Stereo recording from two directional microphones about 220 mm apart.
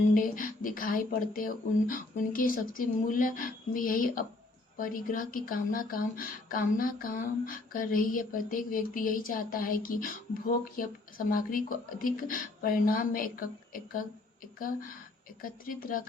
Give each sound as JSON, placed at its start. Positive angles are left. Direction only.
{"t": 0.1, "sound": "speech", "side_deg": 40}
{"t": 15.4, "sound": "speech", "side_deg": 40}